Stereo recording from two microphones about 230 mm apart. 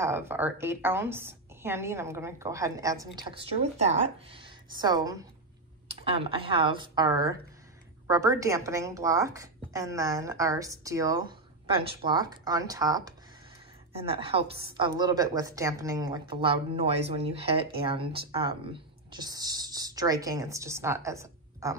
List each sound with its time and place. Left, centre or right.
0.0 s a woman's voice: centre